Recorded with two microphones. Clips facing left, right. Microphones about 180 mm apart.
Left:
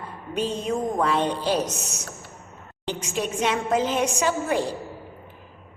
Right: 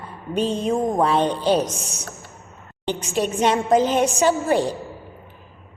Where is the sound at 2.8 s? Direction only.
35° right (ahead or behind).